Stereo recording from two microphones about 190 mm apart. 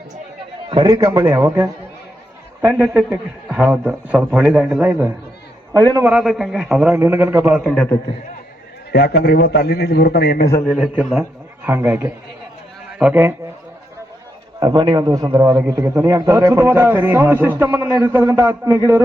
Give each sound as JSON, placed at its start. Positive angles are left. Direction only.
{"t": 0.7, "sound": "a man's voice", "side_deg": -20}
{"t": 5.7, "sound": "a man's voice", "side_deg": -20}
{"t": 6.0, "sound": "a man's voice", "side_deg": -10}
{"t": 7.7, "sound": "a man's voice", "side_deg": 5}
{"t": 8.9, "sound": "a man's voice", "side_deg": 55}
{"t": 10.7, "sound": "a man's voice", "side_deg": 0}
{"t": 14.6, "sound": "a man's voice", "side_deg": -20}